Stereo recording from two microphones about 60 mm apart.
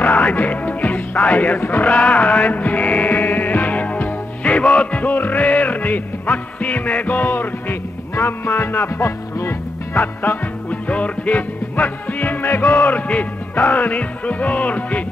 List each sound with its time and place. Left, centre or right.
0.0 s music: left
8.2 s music: left
9.0 s music: left
10.2 s music: left